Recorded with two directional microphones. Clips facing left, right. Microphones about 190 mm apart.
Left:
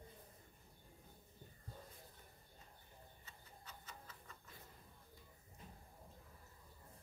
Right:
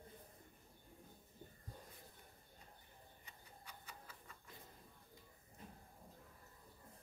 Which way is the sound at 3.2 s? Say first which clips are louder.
Even; 10° right (ahead or behind).